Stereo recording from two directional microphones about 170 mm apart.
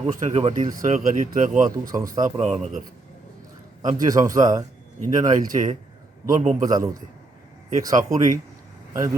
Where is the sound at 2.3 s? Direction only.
40° right (ahead or behind).